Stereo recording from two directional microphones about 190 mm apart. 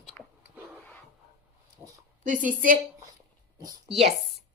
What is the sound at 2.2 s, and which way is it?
Speech, 45° right (ahead or behind).